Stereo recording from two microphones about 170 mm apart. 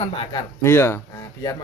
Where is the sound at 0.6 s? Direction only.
15° left (ahead or behind).